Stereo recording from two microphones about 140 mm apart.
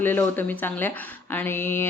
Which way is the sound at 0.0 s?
15° left (ahead or behind).